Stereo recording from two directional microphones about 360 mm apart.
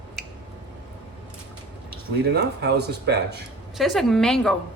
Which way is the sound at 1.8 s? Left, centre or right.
Right.